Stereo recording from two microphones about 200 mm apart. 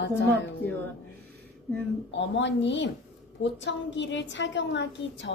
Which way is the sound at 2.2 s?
60° left (ahead or behind).